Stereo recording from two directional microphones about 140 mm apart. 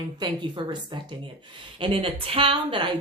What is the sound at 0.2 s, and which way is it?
A woman's voice, 35° right (ahead or behind).